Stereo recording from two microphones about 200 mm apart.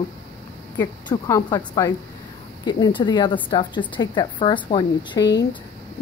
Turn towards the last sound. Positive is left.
turn(degrees=25)  # may be behind; listen again after turning